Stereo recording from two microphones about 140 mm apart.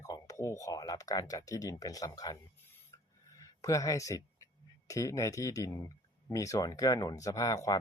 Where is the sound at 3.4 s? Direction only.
25° left (ahead or behind).